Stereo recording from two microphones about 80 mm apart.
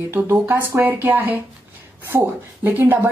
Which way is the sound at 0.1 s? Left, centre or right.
Right.